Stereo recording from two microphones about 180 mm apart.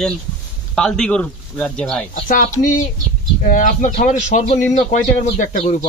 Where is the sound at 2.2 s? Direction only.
50° left (ahead or behind).